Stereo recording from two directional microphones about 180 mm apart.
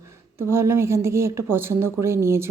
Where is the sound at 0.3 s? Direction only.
15° right (ahead or behind).